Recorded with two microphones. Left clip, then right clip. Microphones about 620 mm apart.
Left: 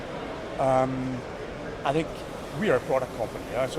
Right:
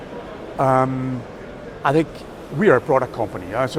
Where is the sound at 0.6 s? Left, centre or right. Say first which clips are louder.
Right 6 dB; right.